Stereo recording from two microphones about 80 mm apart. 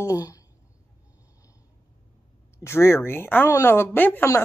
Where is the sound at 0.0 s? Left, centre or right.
Left.